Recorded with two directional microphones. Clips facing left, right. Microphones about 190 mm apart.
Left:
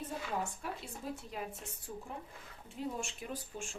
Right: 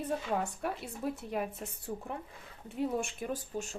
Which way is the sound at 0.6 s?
65° right (ahead or behind).